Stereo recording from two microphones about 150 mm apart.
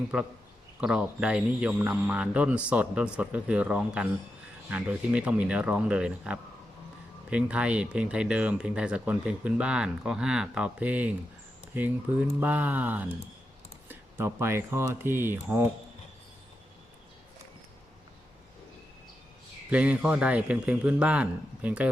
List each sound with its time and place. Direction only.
0.1 s speech: 5° right (ahead or behind)
12.4 s speech: 10° right (ahead or behind)
19.7 s speech: 10° right (ahead or behind)